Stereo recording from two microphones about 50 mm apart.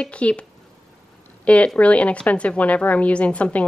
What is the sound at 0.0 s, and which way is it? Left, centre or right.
A woman's voice, left.